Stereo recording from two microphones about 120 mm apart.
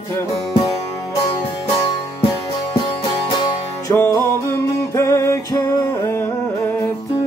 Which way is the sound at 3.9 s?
25° left (ahead or behind).